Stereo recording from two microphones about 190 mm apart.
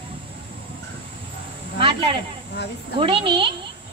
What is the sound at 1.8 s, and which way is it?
A woman's voice, 25° right (ahead or behind).